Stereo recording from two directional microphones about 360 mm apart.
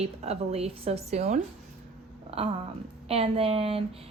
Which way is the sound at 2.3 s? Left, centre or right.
Centre.